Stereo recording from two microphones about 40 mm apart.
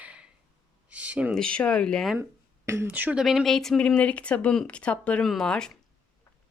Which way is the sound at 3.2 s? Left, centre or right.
Centre.